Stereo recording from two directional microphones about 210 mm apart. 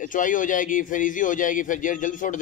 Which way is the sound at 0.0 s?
40° left (ahead or behind).